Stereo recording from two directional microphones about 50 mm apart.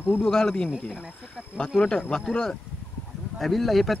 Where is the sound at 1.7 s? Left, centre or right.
Left.